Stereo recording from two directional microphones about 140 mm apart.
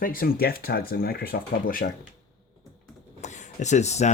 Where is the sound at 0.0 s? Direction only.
90° left.